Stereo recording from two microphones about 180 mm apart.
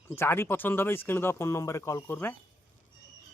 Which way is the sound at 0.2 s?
10° left (ahead or behind).